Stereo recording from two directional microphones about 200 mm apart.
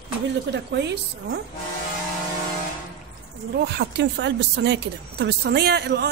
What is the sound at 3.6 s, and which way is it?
A woman's voice, 60° right (ahead or behind).